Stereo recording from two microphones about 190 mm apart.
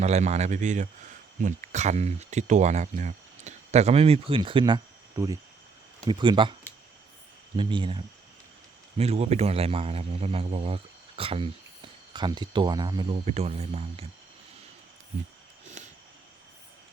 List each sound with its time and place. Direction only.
0.0 s speech: 35° right (ahead or behind)